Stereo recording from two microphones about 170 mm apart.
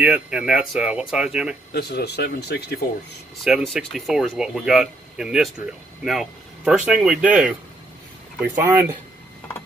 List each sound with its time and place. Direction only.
0.0 s speech: 5° right (ahead or behind)
1.7 s speech: 70° left (ahead or behind)
3.4 s speech: centre (ahead or behind)
8.6 s speech: 10° right (ahead or behind)